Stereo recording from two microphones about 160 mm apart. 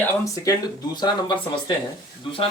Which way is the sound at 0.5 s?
20° left (ahead or behind).